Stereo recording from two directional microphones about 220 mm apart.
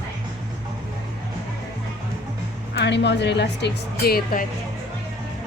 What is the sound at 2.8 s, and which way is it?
A woman's voice, 50° left (ahead or behind).